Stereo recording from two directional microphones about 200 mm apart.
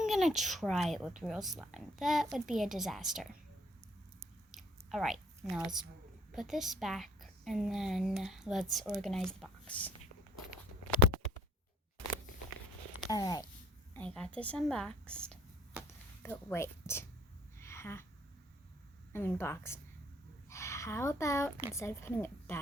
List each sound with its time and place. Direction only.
0.1 s a woman's voice: centre (ahead or behind)
4.5 s chewing: centre (ahead or behind)
6.3 s a woman's voice: centre (ahead or behind)
13.1 s speech: 20° left (ahead or behind)
13.9 s a woman's voice: 5° left (ahead or behind)
17.6 s a sound: 15° left (ahead or behind)
19.1 s speech: 10° left (ahead or behind)